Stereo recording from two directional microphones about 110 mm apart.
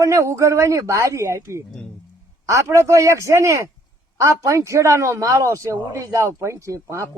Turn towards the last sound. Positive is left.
turn(degrees=-30)  # may be behind; listen again after turning